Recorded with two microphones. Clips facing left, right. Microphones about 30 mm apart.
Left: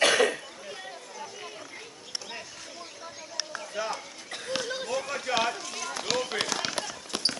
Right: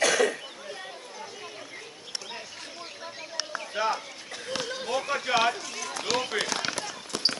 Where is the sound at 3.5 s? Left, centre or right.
Right.